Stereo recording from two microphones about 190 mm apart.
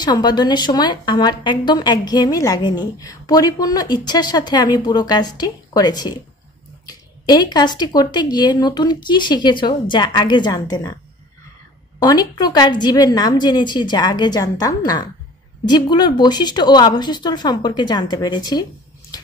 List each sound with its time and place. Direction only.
0.0 s a woman's voice: 20° left (ahead or behind)
12.0 s a woman's voice: 20° left (ahead or behind)